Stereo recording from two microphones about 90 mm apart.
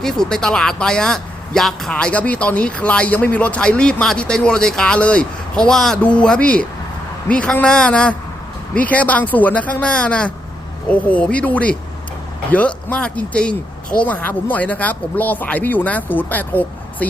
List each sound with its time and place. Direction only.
0.0 s speech: 5° left (ahead or behind)